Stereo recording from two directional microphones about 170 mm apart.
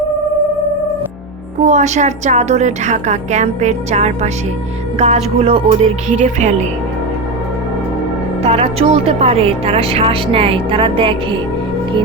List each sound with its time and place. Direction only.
1.6 s a woman's voice: 45° right (ahead or behind)
8.4 s a woman's voice: 35° right (ahead or behind)